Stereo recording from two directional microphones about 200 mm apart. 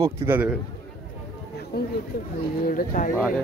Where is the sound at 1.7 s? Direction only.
50° left (ahead or behind).